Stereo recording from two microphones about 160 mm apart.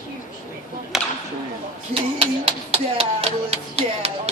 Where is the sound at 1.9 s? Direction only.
35° right (ahead or behind).